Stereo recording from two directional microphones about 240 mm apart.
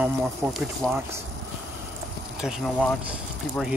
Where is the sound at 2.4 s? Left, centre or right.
Centre.